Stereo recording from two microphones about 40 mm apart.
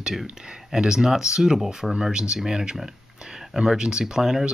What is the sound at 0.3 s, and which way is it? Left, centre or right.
Speech, centre.